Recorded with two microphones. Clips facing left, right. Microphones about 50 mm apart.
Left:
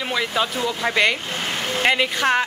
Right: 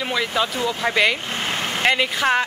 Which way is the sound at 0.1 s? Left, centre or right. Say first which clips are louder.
Even; centre.